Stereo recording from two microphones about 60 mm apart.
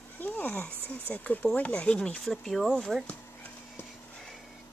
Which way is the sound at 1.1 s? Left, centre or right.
Left.